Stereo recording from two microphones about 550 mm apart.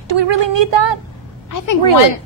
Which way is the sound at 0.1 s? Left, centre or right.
Right.